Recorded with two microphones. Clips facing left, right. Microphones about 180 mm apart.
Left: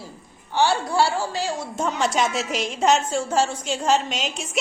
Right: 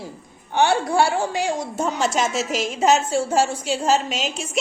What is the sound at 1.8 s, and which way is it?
A woman's voice, centre (ahead or behind).